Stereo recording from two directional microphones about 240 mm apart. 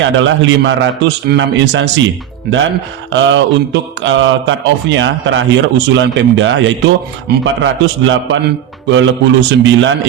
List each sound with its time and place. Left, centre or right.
0.0 s speech: right
3.1 s speech: right